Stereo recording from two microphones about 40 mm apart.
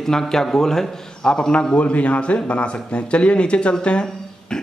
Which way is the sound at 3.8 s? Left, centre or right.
Left.